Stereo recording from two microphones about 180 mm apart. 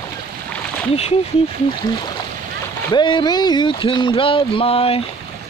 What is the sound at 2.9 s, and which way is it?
Speech, 25° left (ahead or behind).